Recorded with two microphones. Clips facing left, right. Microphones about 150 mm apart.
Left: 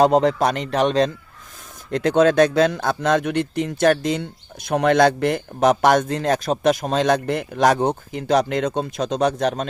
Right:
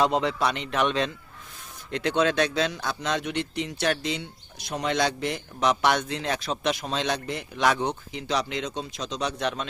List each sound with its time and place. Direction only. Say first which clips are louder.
0.0 s speech: left 8 dB; 45° left (ahead or behind)